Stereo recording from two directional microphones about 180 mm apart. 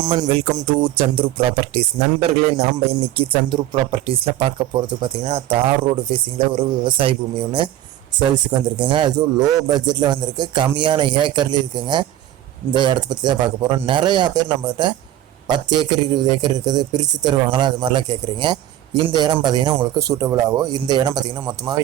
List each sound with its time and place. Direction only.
0.0 s speech: 25° right (ahead or behind)
8.7 s speech: 25° right (ahead or behind)